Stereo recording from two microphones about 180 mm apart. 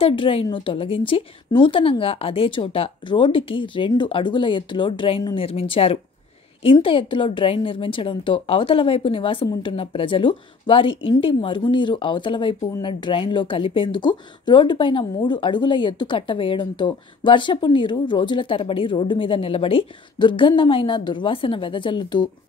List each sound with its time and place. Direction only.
0.0 s speech: 30° left (ahead or behind)